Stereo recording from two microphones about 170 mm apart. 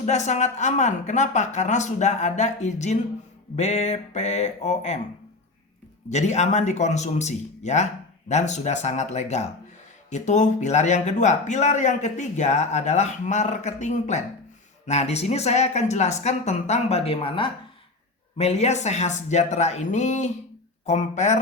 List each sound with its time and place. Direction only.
0.0 s a man's voice: 45° left (ahead or behind)
6.1 s a man's voice: 40° left (ahead or behind)